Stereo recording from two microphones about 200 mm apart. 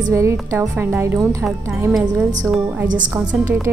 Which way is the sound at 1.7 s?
Centre (ahead or behind).